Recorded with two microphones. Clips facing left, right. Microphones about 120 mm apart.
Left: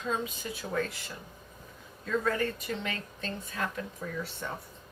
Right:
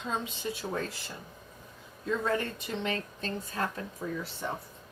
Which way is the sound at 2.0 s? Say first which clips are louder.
Left 1 dB; 20° right (ahead or behind).